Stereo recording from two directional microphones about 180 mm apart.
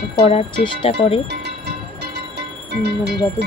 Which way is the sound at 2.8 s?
65° right (ahead or behind).